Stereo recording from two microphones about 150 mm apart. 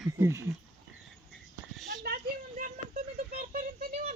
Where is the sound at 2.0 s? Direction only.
75° right (ahead or behind).